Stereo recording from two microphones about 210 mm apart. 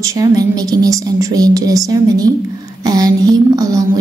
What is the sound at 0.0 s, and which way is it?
A woman's voice, 15° right (ahead or behind).